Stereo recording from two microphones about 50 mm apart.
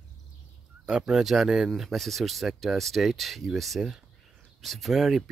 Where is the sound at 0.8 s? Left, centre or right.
Centre.